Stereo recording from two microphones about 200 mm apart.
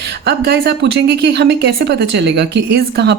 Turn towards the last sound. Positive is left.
turn(degrees=-60)  # may be behind; listen again after turning